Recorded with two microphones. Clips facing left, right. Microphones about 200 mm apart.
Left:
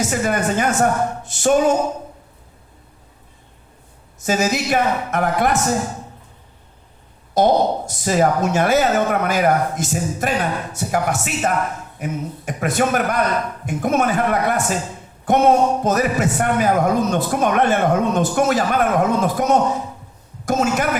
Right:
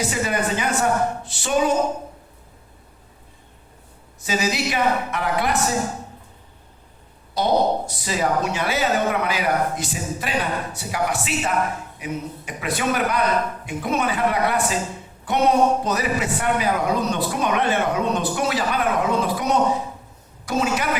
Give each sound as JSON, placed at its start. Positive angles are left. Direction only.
{"t": 0.0, "sound": "a man's voice", "side_deg": 45}
{"t": 4.2, "sound": "a man's voice", "side_deg": 45}
{"t": 7.3, "sound": "a man's voice", "side_deg": 45}